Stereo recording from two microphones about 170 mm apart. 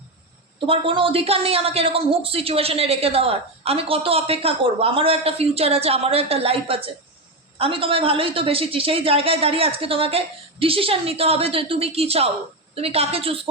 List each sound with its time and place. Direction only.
0.7 s a woman's voice: 30° right (ahead or behind)